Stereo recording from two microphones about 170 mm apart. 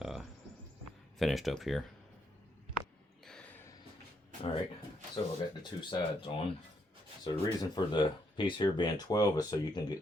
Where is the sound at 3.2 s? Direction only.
5° left (ahead or behind).